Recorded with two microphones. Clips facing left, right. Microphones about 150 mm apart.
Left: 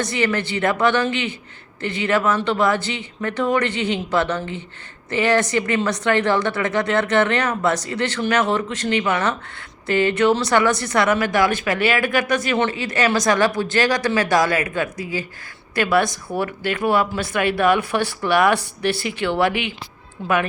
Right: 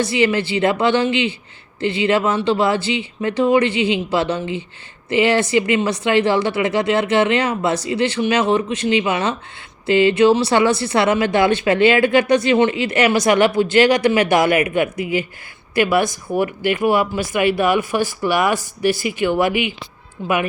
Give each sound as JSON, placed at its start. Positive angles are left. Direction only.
{"t": 0.2, "sound": "speech", "side_deg": -15}